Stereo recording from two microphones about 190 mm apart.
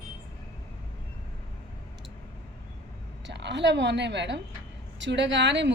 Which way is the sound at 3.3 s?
65° right (ahead or behind).